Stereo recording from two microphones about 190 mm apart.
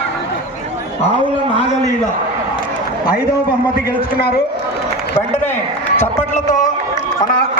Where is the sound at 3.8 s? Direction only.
55° left (ahead or behind).